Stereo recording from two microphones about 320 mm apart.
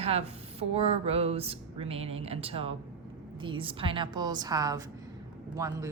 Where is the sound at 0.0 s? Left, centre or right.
Centre.